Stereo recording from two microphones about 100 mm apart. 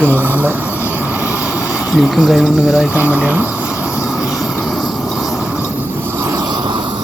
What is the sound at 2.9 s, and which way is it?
Speech, 15° right (ahead or behind).